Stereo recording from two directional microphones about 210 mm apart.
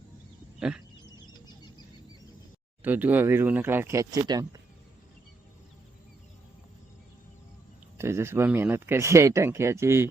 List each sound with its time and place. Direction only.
1.3 s a sound: 20° left (ahead or behind)
2.8 s speech: 10° right (ahead or behind)
7.9 s speech: 10° right (ahead or behind)